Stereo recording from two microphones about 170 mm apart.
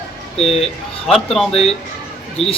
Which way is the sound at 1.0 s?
Centre (ahead or behind).